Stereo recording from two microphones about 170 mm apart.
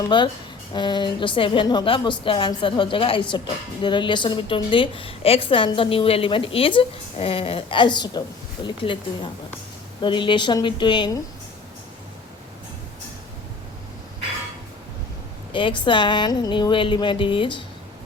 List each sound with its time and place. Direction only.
0.1 s a woman's voice: 30° left (ahead or behind)
15.5 s a woman's voice: 30° left (ahead or behind)